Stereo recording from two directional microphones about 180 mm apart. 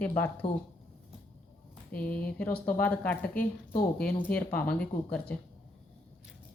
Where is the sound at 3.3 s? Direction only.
55° left (ahead or behind).